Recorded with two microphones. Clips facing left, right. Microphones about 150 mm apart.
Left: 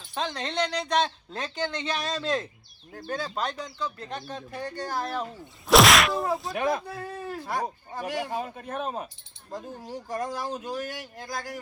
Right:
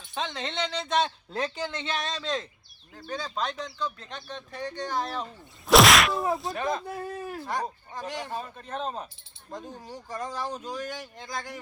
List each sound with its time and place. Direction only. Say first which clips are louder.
0.1 s a sound: left 2 dB; centre (ahead or behind)
6.5 s speech: left 3 dB; 15° left (ahead or behind)
6.8 s speech: right 1 dB; 20° right (ahead or behind)
7.4 s speech: left 2 dB; 10° left (ahead or behind)